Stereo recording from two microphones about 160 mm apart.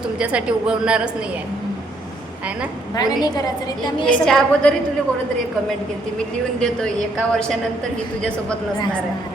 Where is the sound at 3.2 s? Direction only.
25° left (ahead or behind).